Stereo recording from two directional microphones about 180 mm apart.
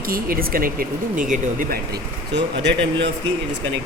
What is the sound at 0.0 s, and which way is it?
Speech, 55° right (ahead or behind).